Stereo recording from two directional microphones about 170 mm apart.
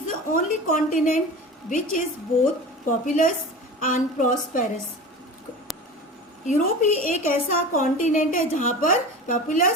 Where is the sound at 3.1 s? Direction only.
50° left (ahead or behind).